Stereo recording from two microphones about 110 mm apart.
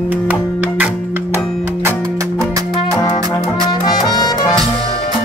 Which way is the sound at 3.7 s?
40° left (ahead or behind).